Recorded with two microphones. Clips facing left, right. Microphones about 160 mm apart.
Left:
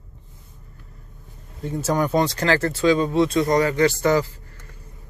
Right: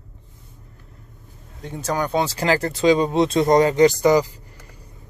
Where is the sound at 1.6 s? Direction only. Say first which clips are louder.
Left 2 dB; centre (ahead or behind); by 4.2 s 15° right (ahead or behind).